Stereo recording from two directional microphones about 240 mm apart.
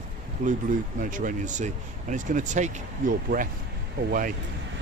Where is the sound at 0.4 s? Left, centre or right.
Right.